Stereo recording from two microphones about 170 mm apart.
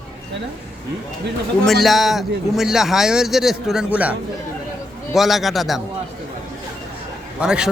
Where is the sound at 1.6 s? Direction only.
Centre (ahead or behind).